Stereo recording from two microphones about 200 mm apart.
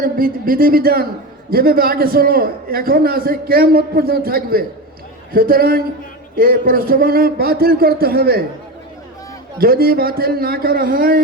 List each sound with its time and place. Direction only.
0.0 s a man's voice: 45° right (ahead or behind)
9.6 s a man's voice: 50° right (ahead or behind)